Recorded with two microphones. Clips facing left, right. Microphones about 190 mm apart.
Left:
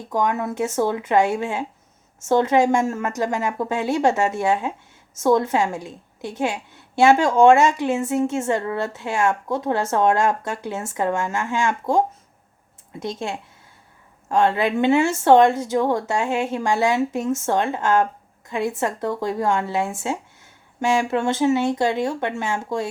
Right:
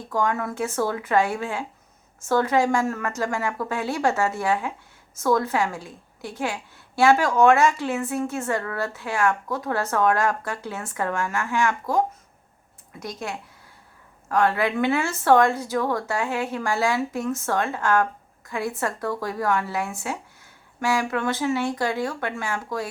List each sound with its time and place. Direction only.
0.1 s a woman's voice: 20° left (ahead or behind)